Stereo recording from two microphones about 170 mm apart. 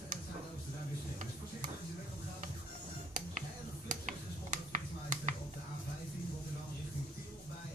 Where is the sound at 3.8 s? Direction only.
45° right (ahead or behind).